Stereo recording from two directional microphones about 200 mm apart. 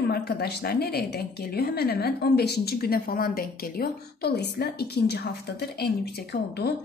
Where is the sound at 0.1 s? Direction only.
50° left (ahead or behind).